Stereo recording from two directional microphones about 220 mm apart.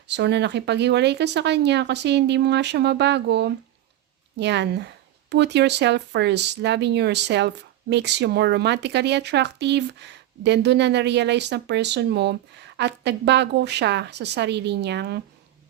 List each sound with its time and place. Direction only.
0.1 s speech: 50° right (ahead or behind)